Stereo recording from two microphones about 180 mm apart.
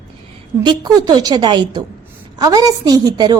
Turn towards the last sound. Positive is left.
turn(degrees=-20)  # may be behind; listen again after turning